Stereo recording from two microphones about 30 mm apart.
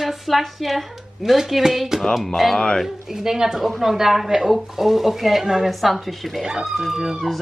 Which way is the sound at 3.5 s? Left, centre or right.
Centre.